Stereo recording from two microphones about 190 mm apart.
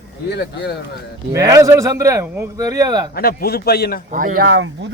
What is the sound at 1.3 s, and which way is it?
A man's voice, 15° right (ahead or behind).